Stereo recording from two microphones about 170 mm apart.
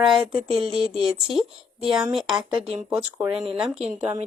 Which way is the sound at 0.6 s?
30° right (ahead or behind).